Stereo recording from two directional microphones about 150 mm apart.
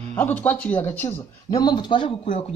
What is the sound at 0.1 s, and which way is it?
Speech, 10° left (ahead or behind).